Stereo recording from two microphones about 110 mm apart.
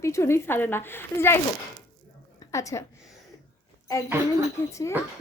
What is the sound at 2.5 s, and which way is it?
Speech, 30° left (ahead or behind).